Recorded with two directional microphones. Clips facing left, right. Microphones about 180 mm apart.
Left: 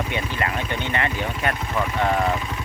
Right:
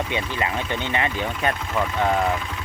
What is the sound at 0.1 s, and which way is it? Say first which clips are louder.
Speech: even; 20° right (ahead or behind).